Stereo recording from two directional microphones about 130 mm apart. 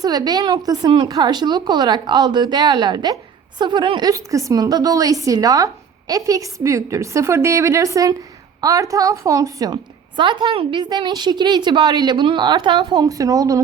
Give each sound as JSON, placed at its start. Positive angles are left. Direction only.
{"t": 0.0, "sound": "a woman's voice", "side_deg": -30}
{"t": 4.1, "sound": "a woman's voice", "side_deg": -25}
{"t": 10.2, "sound": "a woman's voice", "side_deg": -40}